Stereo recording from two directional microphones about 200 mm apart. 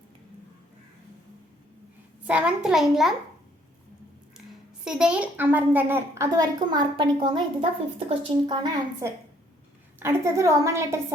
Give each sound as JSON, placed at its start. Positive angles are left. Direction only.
{"t": 2.2, "sound": "a child's voice", "side_deg": -5}
{"t": 4.9, "sound": "a woman's voice", "side_deg": -5}